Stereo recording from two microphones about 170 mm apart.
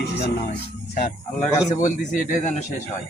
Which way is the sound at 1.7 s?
50° left (ahead or behind).